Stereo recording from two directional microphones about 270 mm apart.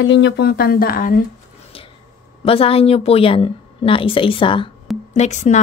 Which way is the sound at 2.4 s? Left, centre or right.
Left.